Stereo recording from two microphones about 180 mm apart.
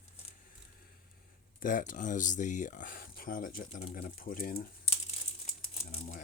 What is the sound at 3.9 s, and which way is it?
Speech, 50° left (ahead or behind).